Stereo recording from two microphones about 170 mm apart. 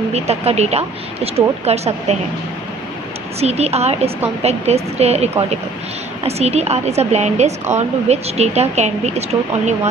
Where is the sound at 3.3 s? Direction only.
40° right (ahead or behind).